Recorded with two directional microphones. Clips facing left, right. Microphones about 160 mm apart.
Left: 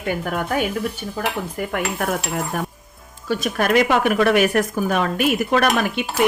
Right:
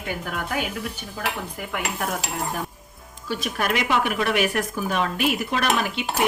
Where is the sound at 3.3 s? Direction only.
45° left (ahead or behind).